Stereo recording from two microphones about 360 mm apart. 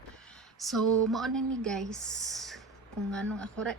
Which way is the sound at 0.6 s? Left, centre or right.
Centre.